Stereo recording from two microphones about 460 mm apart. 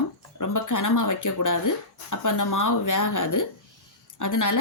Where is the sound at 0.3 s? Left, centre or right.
Left.